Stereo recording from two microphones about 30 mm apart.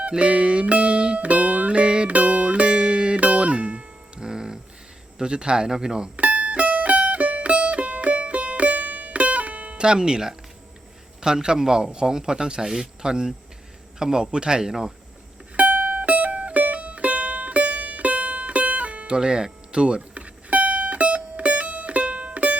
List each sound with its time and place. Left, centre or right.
0.1 s music: right
1.2 s music: right
2.0 s music: right
3.2 s music: right
4.2 s music: right
5.1 s a man's voice: right
6.1 s music: right
9.1 s music: right
9.7 s a man's voice: right
14.7 s speech: centre
15.5 s music: right
19.0 s speech: right
20.1 s music: right